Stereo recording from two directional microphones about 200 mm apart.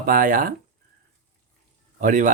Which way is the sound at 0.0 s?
45° right (ahead or behind).